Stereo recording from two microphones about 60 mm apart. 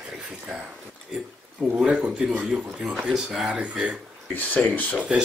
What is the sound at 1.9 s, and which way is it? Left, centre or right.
Speech, centre.